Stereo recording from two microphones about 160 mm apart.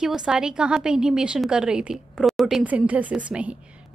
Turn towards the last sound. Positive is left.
turn(degrees=-5)  # may be behind; listen again after turning